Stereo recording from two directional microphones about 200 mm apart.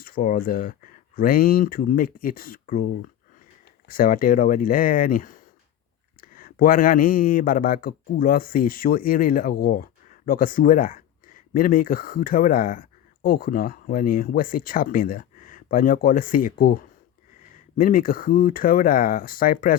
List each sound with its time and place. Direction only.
0.0 s speech: 45° left (ahead or behind)
3.8 s speech: 45° left (ahead or behind)